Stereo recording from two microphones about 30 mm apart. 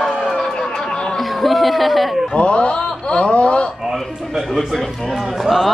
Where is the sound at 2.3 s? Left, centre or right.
Left.